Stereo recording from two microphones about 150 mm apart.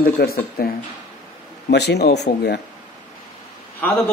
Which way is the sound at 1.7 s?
90° left.